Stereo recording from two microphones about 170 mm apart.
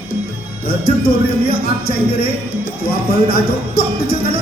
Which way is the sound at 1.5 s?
60° left (ahead or behind).